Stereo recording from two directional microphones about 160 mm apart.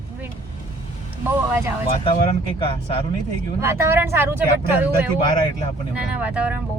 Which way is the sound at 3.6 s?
15° right (ahead or behind).